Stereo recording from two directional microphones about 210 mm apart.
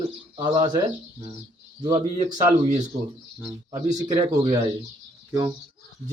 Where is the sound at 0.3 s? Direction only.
20° right (ahead or behind).